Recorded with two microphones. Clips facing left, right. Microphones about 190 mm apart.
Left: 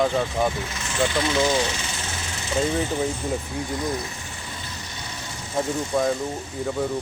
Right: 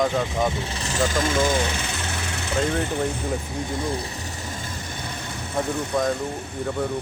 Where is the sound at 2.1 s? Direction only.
60° right (ahead or behind).